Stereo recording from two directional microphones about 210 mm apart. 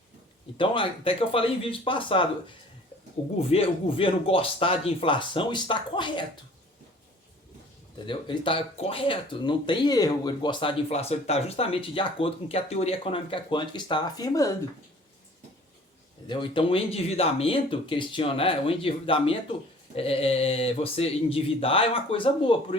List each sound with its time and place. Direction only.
0.5 s speech: 25° left (ahead or behind)
3.3 s speech: 30° left (ahead or behind)
7.9 s speech: 20° left (ahead or behind)
16.2 s speech: 20° left (ahead or behind)